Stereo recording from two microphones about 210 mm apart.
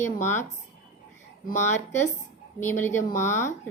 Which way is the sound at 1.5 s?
35° left (ahead or behind).